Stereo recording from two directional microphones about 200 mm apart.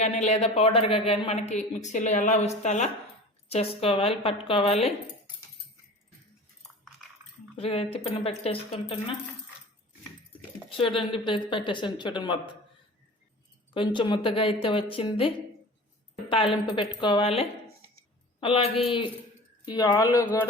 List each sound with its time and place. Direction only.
0.0 s speech: 35° left (ahead or behind)
7.5 s speech: 30° left (ahead or behind)
10.7 s speech: 25° left (ahead or behind)
13.7 s speech: 25° left (ahead or behind)
16.3 s speech: 25° left (ahead or behind)